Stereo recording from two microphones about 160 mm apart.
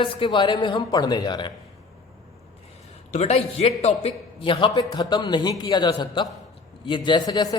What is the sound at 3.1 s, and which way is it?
A man's voice, 40° left (ahead or behind).